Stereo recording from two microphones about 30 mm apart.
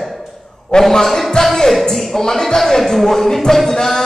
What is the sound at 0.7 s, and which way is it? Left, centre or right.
Speech, left.